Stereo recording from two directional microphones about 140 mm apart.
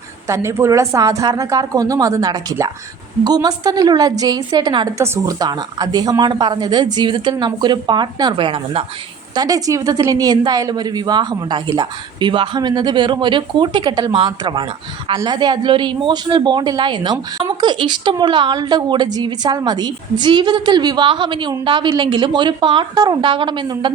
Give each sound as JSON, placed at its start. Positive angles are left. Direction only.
{"t": 0.3, "sound": "a woman's voice", "side_deg": -20}
{"t": 9.3, "sound": "a woman's voice", "side_deg": -25}